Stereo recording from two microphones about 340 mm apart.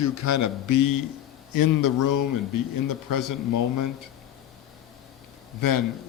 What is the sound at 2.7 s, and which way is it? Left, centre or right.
A man's voice, left.